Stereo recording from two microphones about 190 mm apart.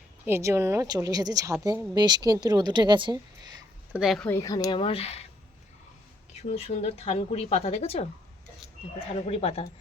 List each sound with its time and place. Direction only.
0.3 s a woman's voice: 15° right (ahead or behind)
3.9 s speech: centre (ahead or behind)
4.3 s speech: 20° left (ahead or behind)
6.3 s speech: 35° left (ahead or behind)